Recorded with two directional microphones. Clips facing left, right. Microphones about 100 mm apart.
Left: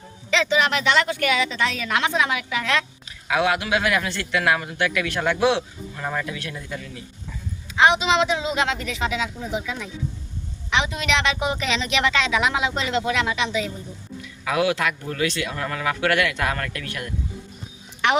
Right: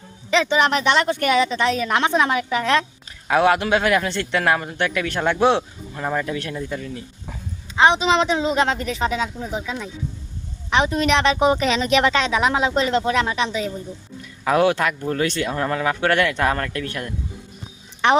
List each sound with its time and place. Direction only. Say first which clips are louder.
0.3 s a woman's voice: right 3 dB; 25° right (ahead or behind)
6.2 s a woman's voice: right 5 dB; 35° right (ahead or behind)
6.5 s a woman's voice: right 6 dB; 25° right (ahead or behind)